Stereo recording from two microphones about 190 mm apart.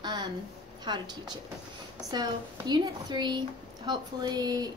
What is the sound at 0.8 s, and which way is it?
A woman's voice, 20° right (ahead or behind).